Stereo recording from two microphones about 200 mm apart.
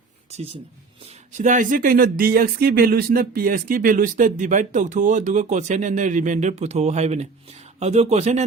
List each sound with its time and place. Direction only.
1.4 s speech: 40° right (ahead or behind)